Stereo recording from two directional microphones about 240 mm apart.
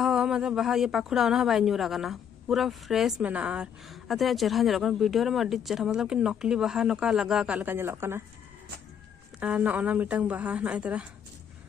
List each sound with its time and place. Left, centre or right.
0.0 s speech: centre
9.4 s speech: centre